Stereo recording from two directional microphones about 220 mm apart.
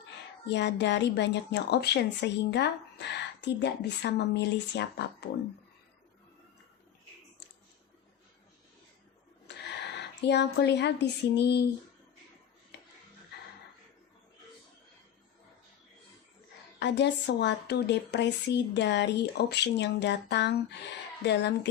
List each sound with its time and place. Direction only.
0.0 s speech: 50° left (ahead or behind)
9.6 s a woman's voice: 50° left (ahead or behind)
12.7 s a sound: 50° left (ahead or behind)
16.8 s speech: 50° left (ahead or behind)